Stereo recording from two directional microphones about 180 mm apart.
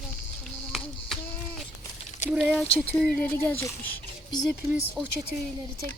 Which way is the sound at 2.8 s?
10° left (ahead or behind).